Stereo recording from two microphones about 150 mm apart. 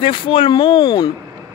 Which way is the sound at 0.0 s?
35° left (ahead or behind).